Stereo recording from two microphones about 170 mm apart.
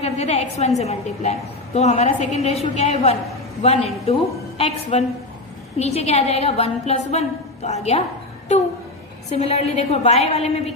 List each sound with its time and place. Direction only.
0.0 s a woman's voice: 40° left (ahead or behind)
9.3 s a woman's voice: 40° left (ahead or behind)